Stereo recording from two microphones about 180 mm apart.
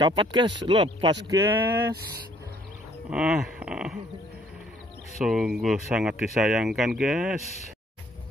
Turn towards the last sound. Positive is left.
turn(degrees=-5)  # may be behind; listen again after turning